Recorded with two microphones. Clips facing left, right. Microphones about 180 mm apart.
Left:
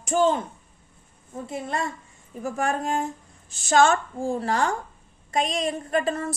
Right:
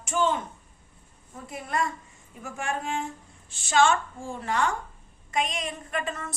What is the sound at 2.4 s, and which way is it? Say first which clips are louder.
A woman's voice: left 6 dB; 40° left (ahead or behind).